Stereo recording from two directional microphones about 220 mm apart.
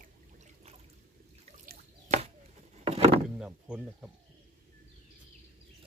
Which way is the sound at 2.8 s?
25° right (ahead or behind).